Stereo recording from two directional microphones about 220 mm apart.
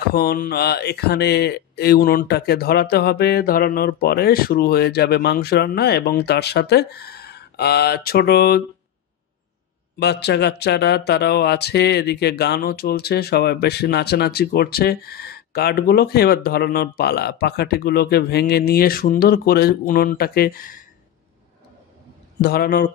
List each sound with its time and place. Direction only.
0.0 s speech: 45° left (ahead or behind)
9.9 s speech: 50° left (ahead or behind)
22.4 s speech: 45° left (ahead or behind)